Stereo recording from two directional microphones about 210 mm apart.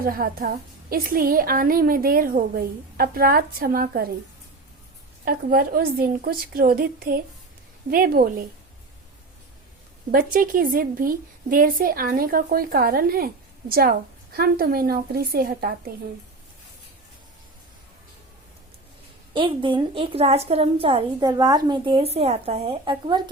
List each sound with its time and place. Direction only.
0.0 s a woman's voice: 45° right (ahead or behind)
5.2 s a woman's voice: 45° right (ahead or behind)
10.1 s a woman's voice: 40° right (ahead or behind)
19.3 s a woman's voice: 25° right (ahead or behind)